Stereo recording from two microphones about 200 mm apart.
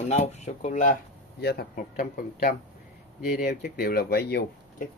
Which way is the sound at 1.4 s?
55° left (ahead or behind).